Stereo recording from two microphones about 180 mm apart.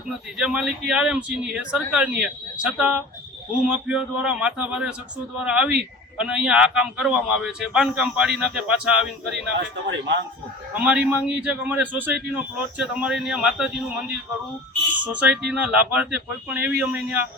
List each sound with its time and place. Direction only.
0.3 s a man's voice: 5° right (ahead or behind)
9.8 s a man's voice: 85° right
10.8 s a man's voice: 5° right (ahead or behind)
15.0 s a man's voice: 10° right (ahead or behind)